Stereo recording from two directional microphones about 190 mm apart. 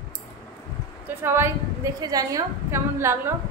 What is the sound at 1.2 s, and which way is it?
A woman's voice, 10° right (ahead or behind).